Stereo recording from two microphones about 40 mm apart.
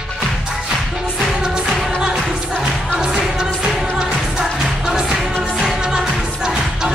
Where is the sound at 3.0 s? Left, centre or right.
Centre.